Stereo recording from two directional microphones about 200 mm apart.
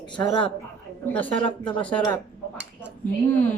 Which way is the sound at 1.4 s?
25° left (ahead or behind).